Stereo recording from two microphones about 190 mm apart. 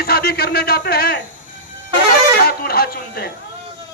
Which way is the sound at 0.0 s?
55° left (ahead or behind).